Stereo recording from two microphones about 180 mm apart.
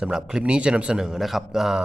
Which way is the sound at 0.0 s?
5° right (ahead or behind).